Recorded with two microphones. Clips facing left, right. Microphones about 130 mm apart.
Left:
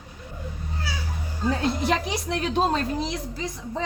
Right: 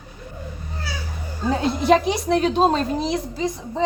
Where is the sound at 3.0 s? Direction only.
25° right (ahead or behind).